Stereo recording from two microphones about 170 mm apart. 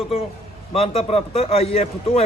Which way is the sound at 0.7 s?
35° left (ahead or behind).